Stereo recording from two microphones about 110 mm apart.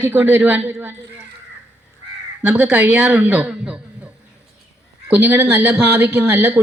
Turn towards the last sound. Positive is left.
turn(degrees=-20)  # may be behind; listen again after turning